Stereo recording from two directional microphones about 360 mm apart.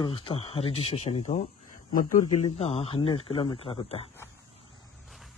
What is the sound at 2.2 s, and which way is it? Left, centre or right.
Speech, left.